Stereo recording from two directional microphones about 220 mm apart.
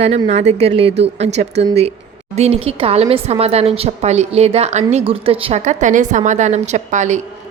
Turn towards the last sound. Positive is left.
turn(degrees=-35)  # may be behind; listen again after turning